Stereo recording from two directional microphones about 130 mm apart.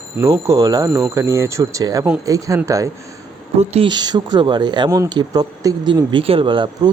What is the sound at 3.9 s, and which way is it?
Speech, 35° right (ahead or behind).